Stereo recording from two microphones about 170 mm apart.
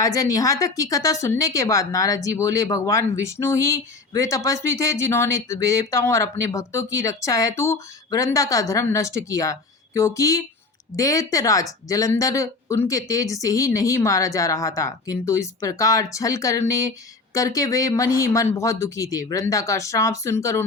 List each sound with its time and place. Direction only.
0.0 s a woman's voice: 20° left (ahead or behind)